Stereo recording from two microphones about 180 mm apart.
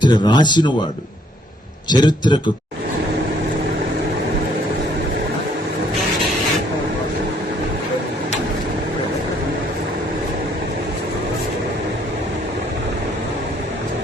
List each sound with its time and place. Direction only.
0.0 s speech: 25° left (ahead or behind)
1.9 s speech: 25° left (ahead or behind)